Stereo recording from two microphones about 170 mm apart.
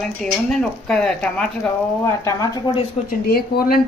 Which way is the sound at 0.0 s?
Centre (ahead or behind).